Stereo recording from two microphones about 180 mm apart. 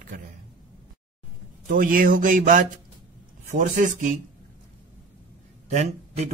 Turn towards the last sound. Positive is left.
turn(degrees=-40)  # may be behind; listen again after turning